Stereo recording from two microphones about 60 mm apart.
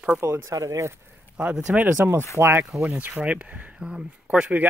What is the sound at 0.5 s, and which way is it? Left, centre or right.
Speech, right.